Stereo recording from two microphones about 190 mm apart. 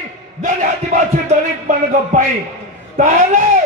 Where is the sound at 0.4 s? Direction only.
40° right (ahead or behind).